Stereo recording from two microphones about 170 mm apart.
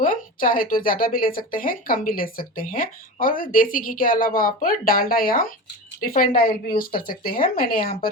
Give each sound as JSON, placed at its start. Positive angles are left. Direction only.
{"t": 0.0, "sound": "speech", "side_deg": 55}